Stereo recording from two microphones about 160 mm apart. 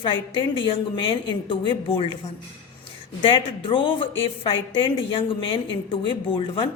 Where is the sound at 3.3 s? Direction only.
30° left (ahead or behind).